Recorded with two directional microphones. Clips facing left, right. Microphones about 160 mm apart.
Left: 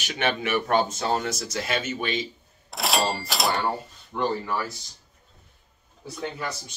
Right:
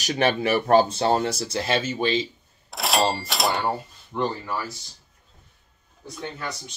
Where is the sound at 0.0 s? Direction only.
35° right (ahead or behind).